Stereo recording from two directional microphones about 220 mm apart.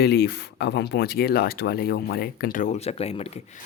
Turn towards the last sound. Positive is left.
turn(degrees=30)  # may be behind; listen again after turning